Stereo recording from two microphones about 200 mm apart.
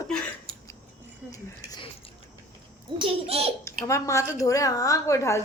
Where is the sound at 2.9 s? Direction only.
30° right (ahead or behind).